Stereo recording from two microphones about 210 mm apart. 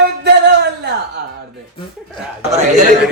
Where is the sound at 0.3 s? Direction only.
50° right (ahead or behind).